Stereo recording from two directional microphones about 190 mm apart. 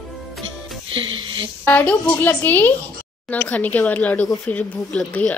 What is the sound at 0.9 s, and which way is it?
Speech, 25° right (ahead or behind).